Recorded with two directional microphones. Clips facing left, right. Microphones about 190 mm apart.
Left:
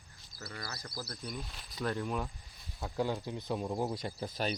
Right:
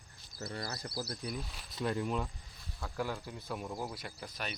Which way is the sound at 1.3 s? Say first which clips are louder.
Right 2 dB; 5° right (ahead or behind).